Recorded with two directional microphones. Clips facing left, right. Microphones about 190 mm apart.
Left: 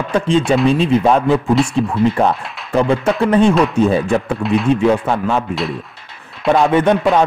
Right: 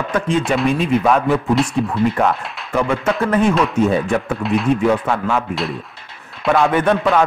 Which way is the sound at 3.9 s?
30° left (ahead or behind).